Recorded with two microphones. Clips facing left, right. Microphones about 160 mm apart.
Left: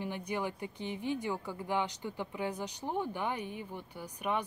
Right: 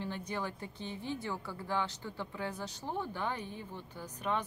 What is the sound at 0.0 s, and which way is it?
Speech, 15° left (ahead or behind).